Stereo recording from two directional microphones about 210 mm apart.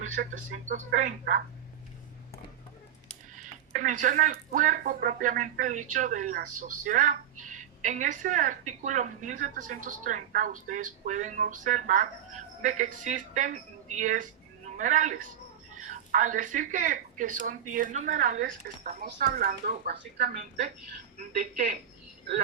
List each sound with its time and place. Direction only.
0.2 s speech: 50° right (ahead or behind)
3.3 s speech: 35° right (ahead or behind)